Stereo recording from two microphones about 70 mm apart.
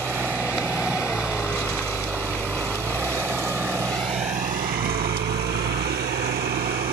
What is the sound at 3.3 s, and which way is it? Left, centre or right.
Vehicle, right.